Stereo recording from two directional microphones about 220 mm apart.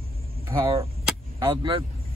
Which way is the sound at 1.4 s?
25° right (ahead or behind).